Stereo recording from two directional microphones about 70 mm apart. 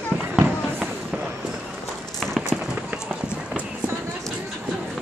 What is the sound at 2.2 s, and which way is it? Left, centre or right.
Rain on surface, centre.